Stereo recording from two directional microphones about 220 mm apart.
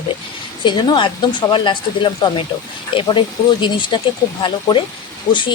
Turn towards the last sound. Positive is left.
turn(degrees=20)  # may be behind; listen again after turning